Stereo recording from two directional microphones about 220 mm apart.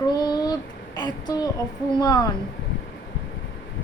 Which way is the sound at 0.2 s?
20° left (ahead or behind).